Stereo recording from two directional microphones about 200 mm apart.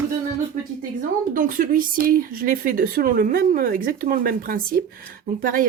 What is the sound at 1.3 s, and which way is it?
Speech, 45° right (ahead or behind).